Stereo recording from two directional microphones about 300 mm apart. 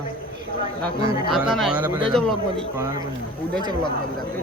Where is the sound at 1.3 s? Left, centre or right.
Centre.